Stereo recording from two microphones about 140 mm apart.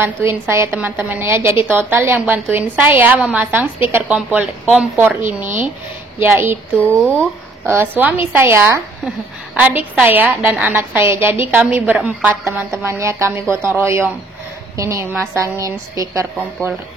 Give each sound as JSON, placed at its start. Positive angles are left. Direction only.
{"t": 0.0, "sound": "a woman's voice", "side_deg": -15}
{"t": 6.1, "sound": "a woman's voice", "side_deg": -15}
{"t": 6.8, "sound": "speech", "side_deg": 10}
{"t": 7.6, "sound": "a woman's voice", "side_deg": -15}